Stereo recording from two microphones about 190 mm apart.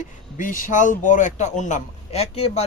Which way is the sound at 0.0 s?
45° left (ahead or behind).